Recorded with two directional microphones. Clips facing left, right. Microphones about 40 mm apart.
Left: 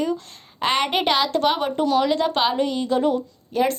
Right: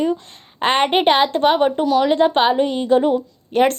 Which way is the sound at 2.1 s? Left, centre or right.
Right.